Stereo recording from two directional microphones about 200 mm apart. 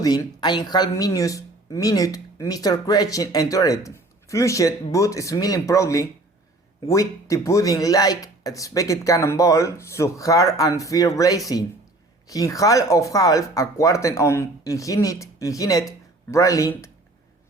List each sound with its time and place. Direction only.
0.0 s speech: 20° left (ahead or behind)